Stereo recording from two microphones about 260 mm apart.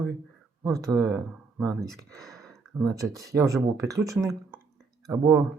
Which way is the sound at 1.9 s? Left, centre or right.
Centre.